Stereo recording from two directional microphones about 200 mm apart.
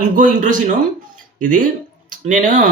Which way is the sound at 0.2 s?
40° right (ahead or behind).